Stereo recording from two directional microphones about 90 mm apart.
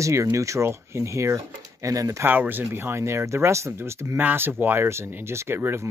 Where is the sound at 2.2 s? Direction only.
20° right (ahead or behind).